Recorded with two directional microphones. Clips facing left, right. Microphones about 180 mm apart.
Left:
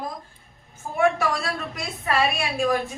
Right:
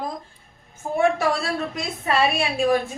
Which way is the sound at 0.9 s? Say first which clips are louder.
Right 2 dB; 25° right (ahead or behind).